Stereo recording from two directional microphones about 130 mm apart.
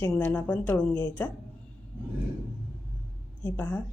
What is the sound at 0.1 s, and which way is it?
A woman's voice, 15° left (ahead or behind).